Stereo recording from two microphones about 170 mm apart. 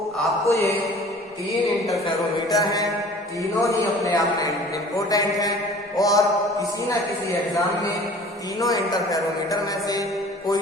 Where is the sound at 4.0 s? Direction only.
20° left (ahead or behind).